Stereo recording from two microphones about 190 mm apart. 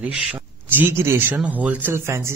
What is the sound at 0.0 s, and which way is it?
Speech, 5° right (ahead or behind).